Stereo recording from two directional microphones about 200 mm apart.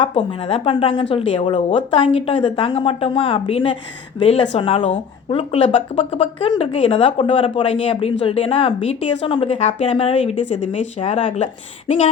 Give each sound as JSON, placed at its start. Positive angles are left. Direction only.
{"t": 0.0, "sound": "speech", "side_deg": 25}